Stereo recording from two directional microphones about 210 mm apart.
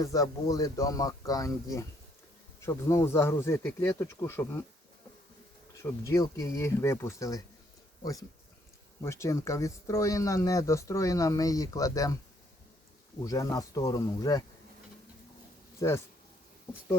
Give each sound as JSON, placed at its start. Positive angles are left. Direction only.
{"t": 0.0, "sound": "speech", "side_deg": 15}
{"t": 5.7, "sound": "speech", "side_deg": 15}
{"t": 9.0, "sound": "speech", "side_deg": 15}
{"t": 13.2, "sound": "speech", "side_deg": 15}